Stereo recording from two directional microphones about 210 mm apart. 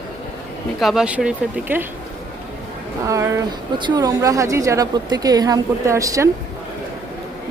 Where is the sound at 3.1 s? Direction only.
15° right (ahead or behind).